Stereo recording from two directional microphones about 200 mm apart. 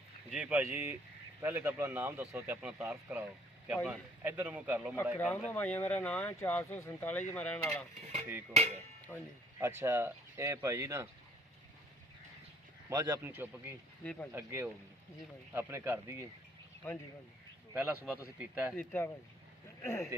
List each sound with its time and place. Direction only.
0.3 s speech: 5° right (ahead or behind)
5.1 s speech: 10° left (ahead or behind)
8.0 s a sound: 35° right (ahead or behind)
9.1 s speech: 10° left (ahead or behind)
9.6 s speech: 15° right (ahead or behind)
12.9 s speech: 15° right (ahead or behind)
14.0 s speech: 5° left (ahead or behind)
14.3 s speech: 10° right (ahead or behind)
17.7 s speech: 5° right (ahead or behind)
18.8 s speech: 10° left (ahead or behind)